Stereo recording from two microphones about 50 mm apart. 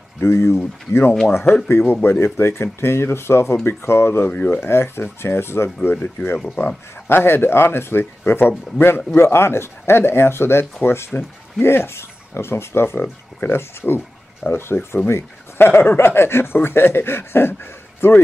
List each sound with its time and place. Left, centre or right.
0.2 s speech: left
6.4 s speech: left
7.1 s speech: left